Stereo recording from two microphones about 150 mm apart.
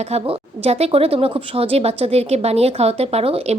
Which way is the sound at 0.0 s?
45° right (ahead or behind).